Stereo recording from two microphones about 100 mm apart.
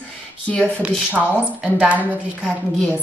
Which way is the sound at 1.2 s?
Centre (ahead or behind).